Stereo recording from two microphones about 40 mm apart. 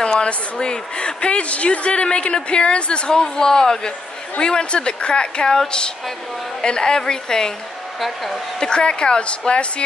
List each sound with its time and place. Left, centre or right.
0.0 s speech: left
6.6 s a woman's voice: centre
8.5 s speech: left